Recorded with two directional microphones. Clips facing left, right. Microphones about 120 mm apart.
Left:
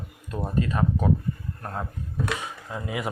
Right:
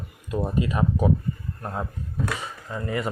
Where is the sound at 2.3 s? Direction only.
5° left (ahead or behind).